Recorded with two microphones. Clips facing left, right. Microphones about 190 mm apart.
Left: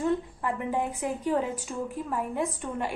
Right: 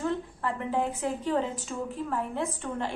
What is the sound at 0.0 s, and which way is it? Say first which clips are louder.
A woman's voice: left 3 dB; 15° left (ahead or behind).